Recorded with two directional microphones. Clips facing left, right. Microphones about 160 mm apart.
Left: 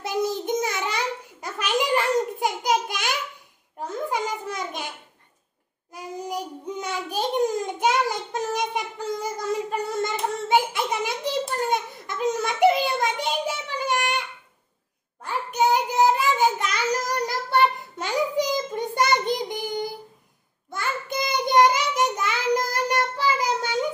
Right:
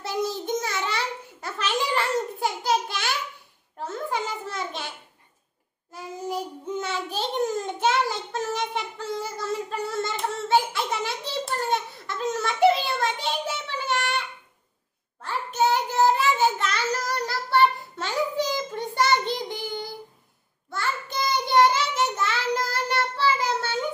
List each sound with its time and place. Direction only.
0.0 s babbling: 20° left (ahead or behind)
3.7 s a sound: 15° left (ahead or behind)
5.9 s child singing: 15° left (ahead or behind)
15.2 s child singing: 15° left (ahead or behind)